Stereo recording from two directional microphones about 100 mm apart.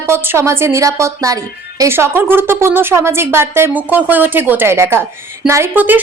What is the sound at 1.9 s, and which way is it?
A woman's voice, 20° right (ahead or behind).